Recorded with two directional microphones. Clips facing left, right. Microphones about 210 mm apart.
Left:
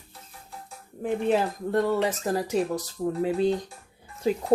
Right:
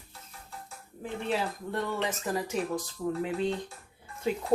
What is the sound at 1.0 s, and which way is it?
Speech, 50° left (ahead or behind).